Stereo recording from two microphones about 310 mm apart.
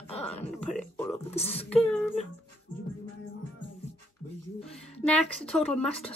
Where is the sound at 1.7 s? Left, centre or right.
Centre.